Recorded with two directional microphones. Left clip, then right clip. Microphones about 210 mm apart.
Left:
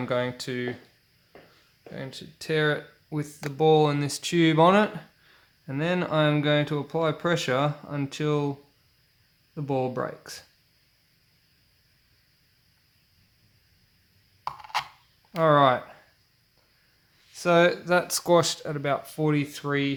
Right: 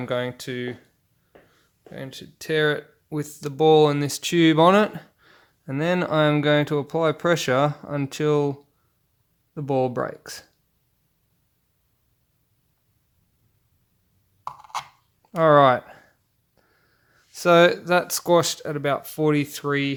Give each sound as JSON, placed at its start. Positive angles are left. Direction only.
{"t": 0.0, "sound": "speech", "side_deg": -20}
{"t": 1.9, "sound": "speech", "side_deg": -30}
{"t": 9.6, "sound": "speech", "side_deg": -40}
{"t": 14.4, "sound": "a sound", "side_deg": 0}
{"t": 15.4, "sound": "speech", "side_deg": -40}
{"t": 17.3, "sound": "speech", "side_deg": -40}